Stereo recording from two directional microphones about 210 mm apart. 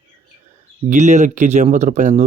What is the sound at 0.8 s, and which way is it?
Speech, 35° right (ahead or behind).